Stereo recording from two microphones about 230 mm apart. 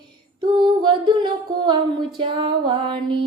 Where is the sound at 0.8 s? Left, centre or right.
Centre.